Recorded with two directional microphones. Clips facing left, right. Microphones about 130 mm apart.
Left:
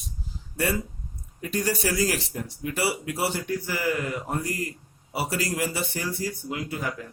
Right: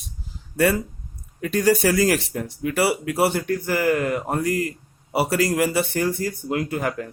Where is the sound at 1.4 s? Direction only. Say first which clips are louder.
Right 8 dB; 65° right (ahead or behind).